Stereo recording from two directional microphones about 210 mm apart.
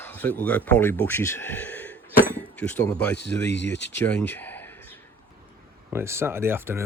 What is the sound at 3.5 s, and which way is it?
Speech, 55° left (ahead or behind).